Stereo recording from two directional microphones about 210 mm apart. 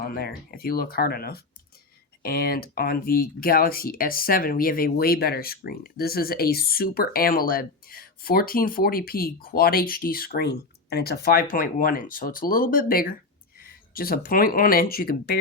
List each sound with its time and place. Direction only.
0.0 s speech: 45° left (ahead or behind)